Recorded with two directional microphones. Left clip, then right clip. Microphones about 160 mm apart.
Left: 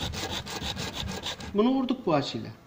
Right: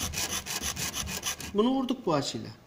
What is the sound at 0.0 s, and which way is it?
Sawing, 20° right (ahead or behind).